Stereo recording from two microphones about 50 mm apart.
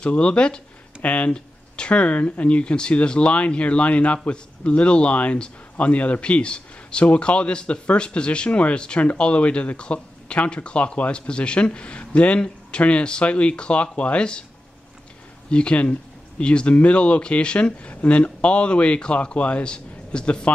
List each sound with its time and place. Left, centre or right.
0.0 s speech: left
15.5 s speech: left